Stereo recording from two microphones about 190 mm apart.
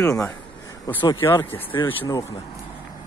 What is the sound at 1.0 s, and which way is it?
Speech, 15° left (ahead or behind).